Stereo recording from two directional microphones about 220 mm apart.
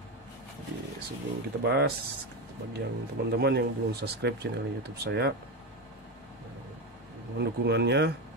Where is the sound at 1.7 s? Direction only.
45° right (ahead or behind).